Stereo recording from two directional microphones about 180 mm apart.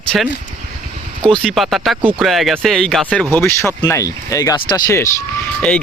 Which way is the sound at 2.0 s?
25° right (ahead or behind).